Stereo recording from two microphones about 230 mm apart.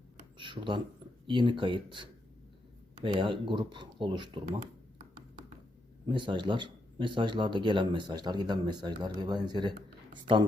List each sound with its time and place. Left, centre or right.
0.3 s a sound: right
1.3 s speech: centre
6.1 s speech: right